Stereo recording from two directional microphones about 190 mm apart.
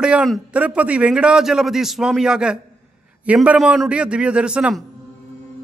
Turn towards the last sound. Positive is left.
turn(degrees=-5)  # may be behind; listen again after turning